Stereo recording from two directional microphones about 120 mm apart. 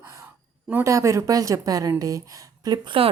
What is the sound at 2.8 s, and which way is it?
Speech, 50° right (ahead or behind).